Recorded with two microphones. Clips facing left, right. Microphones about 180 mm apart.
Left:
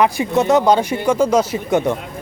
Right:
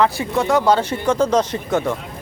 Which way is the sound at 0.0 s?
20° left (ahead or behind).